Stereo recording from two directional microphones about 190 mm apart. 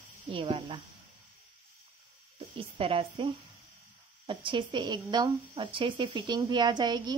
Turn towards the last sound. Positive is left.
turn(degrees=-20)  # may be behind; listen again after turning